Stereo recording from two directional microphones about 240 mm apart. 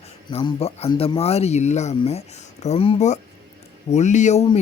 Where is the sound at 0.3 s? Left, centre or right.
Left.